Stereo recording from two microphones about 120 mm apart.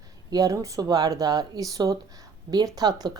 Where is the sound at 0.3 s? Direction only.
30° right (ahead or behind).